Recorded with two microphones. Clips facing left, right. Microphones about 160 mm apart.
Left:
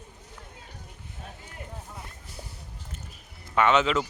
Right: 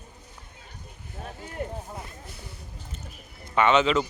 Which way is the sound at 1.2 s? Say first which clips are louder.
Right 10 dB; 60° right (ahead or behind).